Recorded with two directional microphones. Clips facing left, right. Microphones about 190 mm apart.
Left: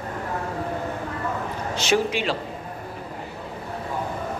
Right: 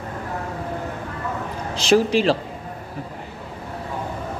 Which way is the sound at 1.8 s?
35° right (ahead or behind).